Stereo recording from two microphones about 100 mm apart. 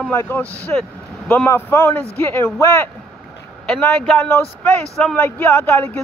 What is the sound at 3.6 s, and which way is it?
Speech, 10° left (ahead or behind).